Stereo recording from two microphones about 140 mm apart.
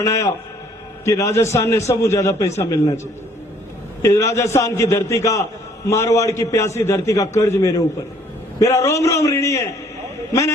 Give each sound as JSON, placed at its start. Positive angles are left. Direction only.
{"t": 0.0, "sound": "a man's voice", "side_deg": 25}
{"t": 4.0, "sound": "a man's voice", "side_deg": 20}